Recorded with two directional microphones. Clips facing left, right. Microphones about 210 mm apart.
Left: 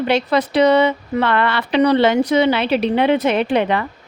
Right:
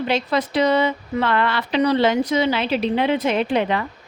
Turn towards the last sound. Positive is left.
turn(degrees=65)  # may be behind; listen again after turning